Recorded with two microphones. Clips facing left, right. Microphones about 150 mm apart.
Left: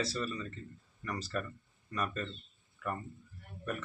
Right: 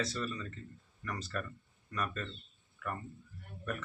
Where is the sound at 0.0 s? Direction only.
5° left (ahead or behind).